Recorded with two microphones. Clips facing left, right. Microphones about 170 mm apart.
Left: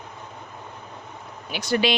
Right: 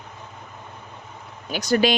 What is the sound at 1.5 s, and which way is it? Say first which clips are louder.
Speech: right 3 dB; 40° right (ahead or behind).